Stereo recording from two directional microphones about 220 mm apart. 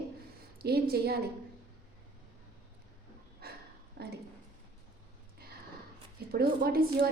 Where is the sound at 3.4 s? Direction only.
45° right (ahead or behind).